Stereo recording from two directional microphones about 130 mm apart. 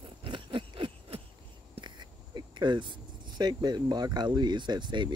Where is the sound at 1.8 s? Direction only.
35° right (ahead or behind).